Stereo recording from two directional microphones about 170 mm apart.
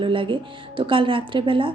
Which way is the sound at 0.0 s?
30° right (ahead or behind).